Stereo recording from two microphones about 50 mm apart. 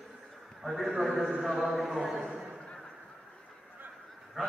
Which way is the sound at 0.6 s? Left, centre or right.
Centre.